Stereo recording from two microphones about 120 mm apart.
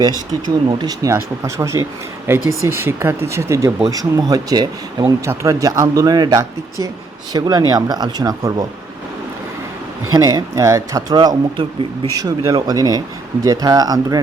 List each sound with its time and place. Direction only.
0.4 s speech: 35° right (ahead or behind)
10.1 s speech: 30° right (ahead or behind)